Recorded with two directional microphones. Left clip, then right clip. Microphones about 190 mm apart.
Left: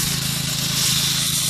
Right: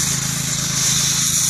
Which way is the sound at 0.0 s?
5° left (ahead or behind).